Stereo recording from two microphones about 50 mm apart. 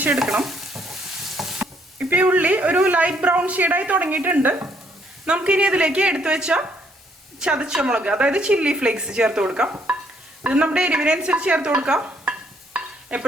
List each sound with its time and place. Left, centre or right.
0.1 s stir: centre
2.0 s a woman's voice: right
5.2 s a woman's voice: right